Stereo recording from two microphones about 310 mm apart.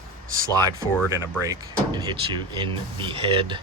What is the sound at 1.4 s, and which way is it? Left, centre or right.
Speech, centre.